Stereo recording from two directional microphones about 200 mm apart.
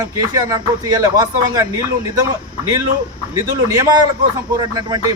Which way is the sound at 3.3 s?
15° right (ahead or behind).